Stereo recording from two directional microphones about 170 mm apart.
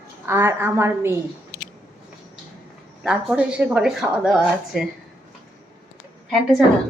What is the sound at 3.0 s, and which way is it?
A woman's voice, 5° right (ahead or behind).